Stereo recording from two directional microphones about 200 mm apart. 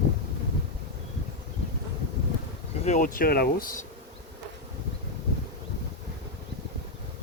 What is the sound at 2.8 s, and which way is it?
Speech, 40° left (ahead or behind).